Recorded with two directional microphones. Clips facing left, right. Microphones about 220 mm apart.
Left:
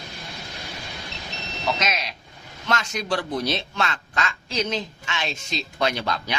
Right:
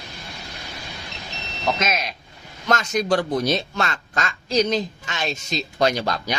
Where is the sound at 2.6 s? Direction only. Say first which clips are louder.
Right 5 dB; 45° right (ahead or behind).